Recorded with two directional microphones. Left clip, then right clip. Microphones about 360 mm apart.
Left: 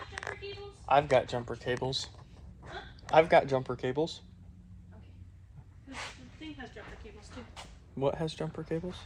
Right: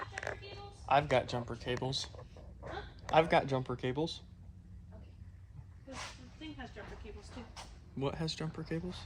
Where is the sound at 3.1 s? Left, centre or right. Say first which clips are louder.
Left 5 dB; centre.